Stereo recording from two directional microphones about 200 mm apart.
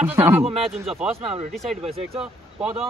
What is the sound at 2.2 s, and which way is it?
Speech, 5° right (ahead or behind).